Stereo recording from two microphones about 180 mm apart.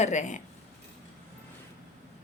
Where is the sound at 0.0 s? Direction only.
40° left (ahead or behind).